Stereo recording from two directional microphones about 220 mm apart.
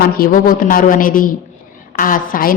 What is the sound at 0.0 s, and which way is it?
A woman's voice, 40° left (ahead or behind).